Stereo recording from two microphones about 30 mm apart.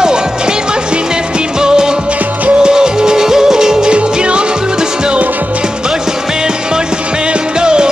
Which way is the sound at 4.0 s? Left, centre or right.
Right.